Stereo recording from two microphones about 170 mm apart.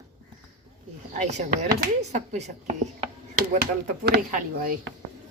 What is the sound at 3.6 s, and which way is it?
Speech, 75° right (ahead or behind).